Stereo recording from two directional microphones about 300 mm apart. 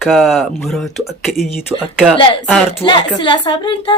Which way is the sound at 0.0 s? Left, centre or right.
Centre.